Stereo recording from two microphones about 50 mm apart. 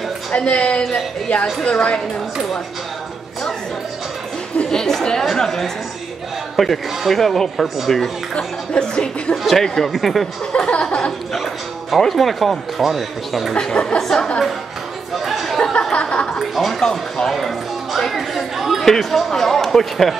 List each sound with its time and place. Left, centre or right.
0.3 s speech: left
4.6 s a woman's voice: centre
8.4 s speech: centre
9.3 s speech: centre
10.7 s speech: left
11.3 s speech: centre
13.6 s a woman's voice: centre
15.1 s chatter: centre
15.9 s a sound: centre
16.3 s a sound: centre
16.9 s speech: centre